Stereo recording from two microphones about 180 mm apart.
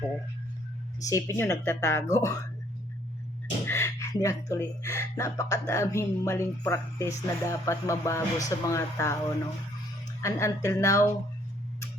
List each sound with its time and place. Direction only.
1.0 s speech: 15° left (ahead or behind)
3.7 s speech: 15° left (ahead or behind)
10.2 s speech: 15° left (ahead or behind)